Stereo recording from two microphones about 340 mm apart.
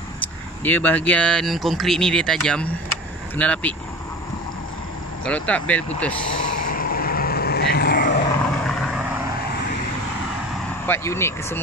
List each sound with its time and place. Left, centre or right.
0.7 s speech: centre
5.2 s speech: centre
6.3 s vehicle: left
10.9 s speech: centre